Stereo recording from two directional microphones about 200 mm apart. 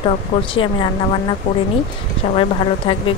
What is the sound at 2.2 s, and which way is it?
Speech, 25° left (ahead or behind).